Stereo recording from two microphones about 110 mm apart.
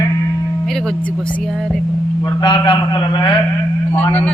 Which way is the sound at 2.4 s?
50° left (ahead or behind).